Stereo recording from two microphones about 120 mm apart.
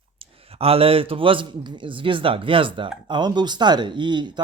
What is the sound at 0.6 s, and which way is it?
A man's voice, 55° right (ahead or behind).